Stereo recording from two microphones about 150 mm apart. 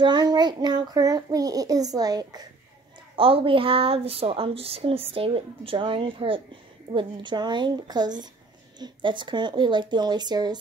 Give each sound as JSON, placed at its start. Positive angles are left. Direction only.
{"t": 0.0, "sound": "a child's voice", "side_deg": -25}
{"t": 3.2, "sound": "a child's voice", "side_deg": -40}